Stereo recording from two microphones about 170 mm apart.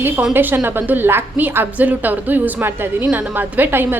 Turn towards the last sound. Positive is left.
turn(degrees=-10)  # may be behind; listen again after turning